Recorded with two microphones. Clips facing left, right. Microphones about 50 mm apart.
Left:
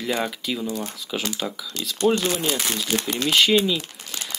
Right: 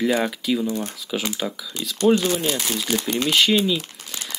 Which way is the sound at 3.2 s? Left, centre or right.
Centre.